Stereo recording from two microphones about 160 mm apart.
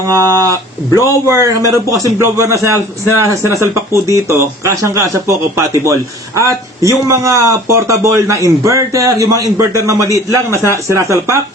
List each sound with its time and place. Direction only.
0.5 s speech: 20° left (ahead or behind)
1.2 s a man's voice: 20° right (ahead or behind)